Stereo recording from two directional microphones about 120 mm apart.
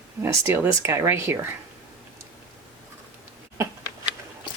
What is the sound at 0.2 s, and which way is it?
Speech, 25° right (ahead or behind).